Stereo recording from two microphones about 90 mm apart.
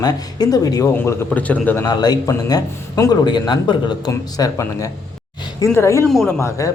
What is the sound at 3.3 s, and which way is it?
A woman's voice, 55° left (ahead or behind).